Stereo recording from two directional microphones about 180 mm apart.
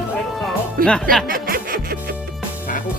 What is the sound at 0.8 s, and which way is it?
Speech, 50° right (ahead or behind).